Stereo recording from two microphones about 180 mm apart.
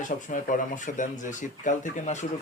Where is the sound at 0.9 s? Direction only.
45° left (ahead or behind).